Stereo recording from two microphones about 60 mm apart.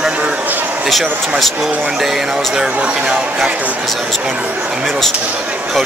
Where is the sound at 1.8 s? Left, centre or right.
Centre.